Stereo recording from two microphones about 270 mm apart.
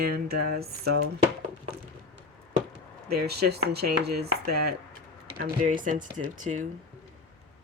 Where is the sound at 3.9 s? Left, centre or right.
Right.